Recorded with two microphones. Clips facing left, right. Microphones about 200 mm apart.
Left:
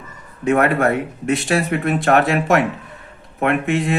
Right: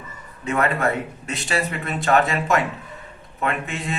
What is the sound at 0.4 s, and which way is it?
Speech, 60° left (ahead or behind).